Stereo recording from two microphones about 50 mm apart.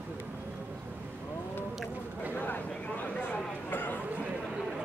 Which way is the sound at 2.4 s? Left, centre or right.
Left.